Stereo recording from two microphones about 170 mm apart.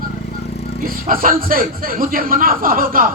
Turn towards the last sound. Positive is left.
turn(degrees=-55)  # may be behind; listen again after turning